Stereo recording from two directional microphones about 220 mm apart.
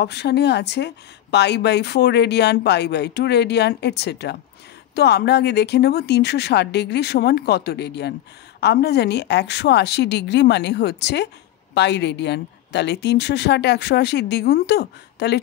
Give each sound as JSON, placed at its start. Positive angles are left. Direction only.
{"t": 0.0, "sound": "speech", "side_deg": 50}